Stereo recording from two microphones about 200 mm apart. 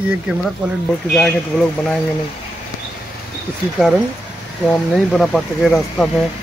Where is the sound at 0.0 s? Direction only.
5° right (ahead or behind).